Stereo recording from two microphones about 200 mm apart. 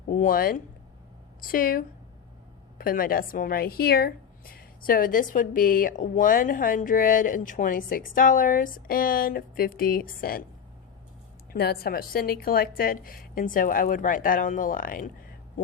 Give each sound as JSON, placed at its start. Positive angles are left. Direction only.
{"t": 0.1, "sound": "a woman's voice", "side_deg": 40}
{"t": 11.5, "sound": "a woman's voice", "side_deg": 50}